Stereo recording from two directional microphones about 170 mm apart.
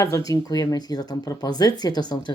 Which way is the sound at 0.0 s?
20° left (ahead or behind).